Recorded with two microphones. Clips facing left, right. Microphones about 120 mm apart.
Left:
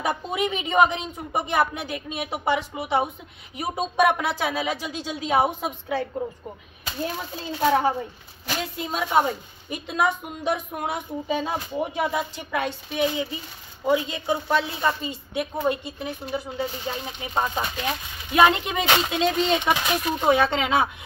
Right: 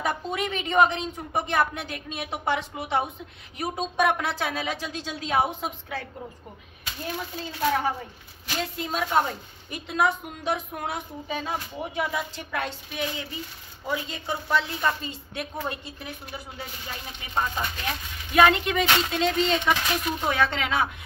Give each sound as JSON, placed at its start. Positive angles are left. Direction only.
{"t": 0.0, "sound": "a woman's voice", "side_deg": 10}
{"t": 7.6, "sound": "speech", "side_deg": 30}
{"t": 8.7, "sound": "a woman's voice", "side_deg": 15}